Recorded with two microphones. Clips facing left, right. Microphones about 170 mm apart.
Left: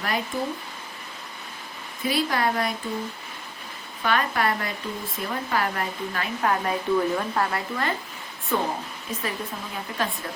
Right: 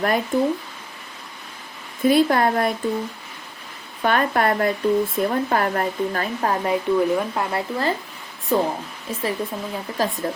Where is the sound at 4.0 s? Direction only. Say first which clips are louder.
Right 5 dB; 50° right (ahead or behind).